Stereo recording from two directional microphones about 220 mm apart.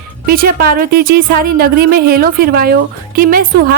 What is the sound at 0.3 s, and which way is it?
A woman's voice, 40° right (ahead or behind).